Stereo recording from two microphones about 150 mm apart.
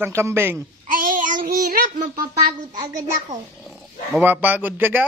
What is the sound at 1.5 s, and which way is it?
Speech, 70° right (ahead or behind).